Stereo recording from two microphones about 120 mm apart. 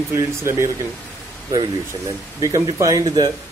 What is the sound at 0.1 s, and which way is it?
Speech, 20° right (ahead or behind).